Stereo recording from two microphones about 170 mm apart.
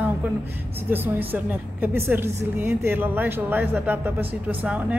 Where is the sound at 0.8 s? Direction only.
10° right (ahead or behind).